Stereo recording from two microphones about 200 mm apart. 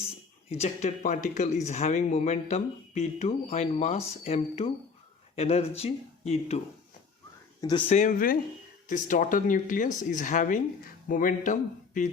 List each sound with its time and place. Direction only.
0.5 s speech: 35° left (ahead or behind)
7.6 s speech: 25° left (ahead or behind)
7.9 s speech: 40° left (ahead or behind)